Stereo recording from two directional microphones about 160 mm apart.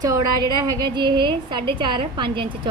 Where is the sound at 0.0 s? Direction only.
25° right (ahead or behind).